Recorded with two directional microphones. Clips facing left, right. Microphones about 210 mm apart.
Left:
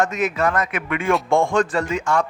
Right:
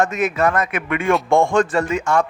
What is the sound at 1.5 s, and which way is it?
Speech, 45° right (ahead or behind).